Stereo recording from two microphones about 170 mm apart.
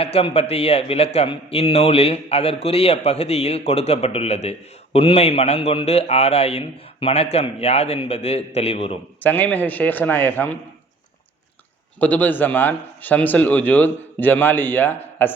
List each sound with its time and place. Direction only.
0.0 s a man's voice: 35° left (ahead or behind)
9.2 s a man's voice: 10° left (ahead or behind)
11.9 s a man's voice: 10° left (ahead or behind)